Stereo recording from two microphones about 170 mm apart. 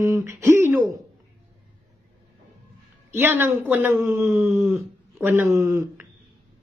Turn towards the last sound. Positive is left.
turn(degrees=-20)  # may be behind; listen again after turning